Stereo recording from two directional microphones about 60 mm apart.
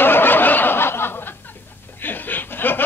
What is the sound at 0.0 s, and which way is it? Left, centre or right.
Snicker, left.